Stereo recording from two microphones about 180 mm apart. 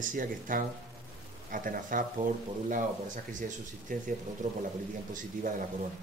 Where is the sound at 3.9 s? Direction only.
50° right (ahead or behind).